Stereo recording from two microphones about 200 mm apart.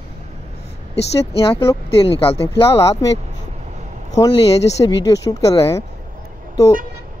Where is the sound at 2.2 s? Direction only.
25° left (ahead or behind).